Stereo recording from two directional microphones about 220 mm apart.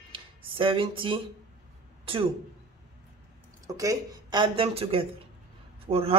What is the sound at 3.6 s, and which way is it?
Speech, 15° right (ahead or behind).